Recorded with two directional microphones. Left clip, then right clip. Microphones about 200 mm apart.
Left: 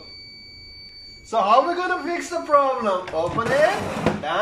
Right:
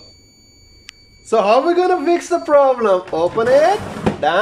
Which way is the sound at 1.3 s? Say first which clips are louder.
Right 4 dB; 55° right (ahead or behind).